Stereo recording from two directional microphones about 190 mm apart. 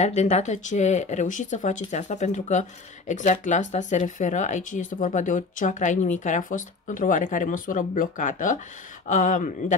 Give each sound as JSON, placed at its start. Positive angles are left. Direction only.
{"t": 0.0, "sound": "speech", "side_deg": 35}